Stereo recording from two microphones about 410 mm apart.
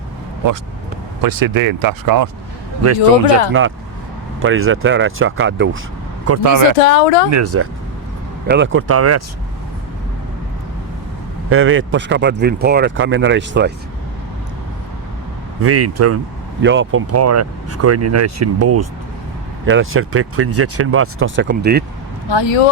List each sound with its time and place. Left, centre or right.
1.2 s speech: right
2.8 s speech: right
6.2 s speech: right
7.3 s speech: right
11.4 s speech: right
15.6 s speech: right
22.3 s speech: left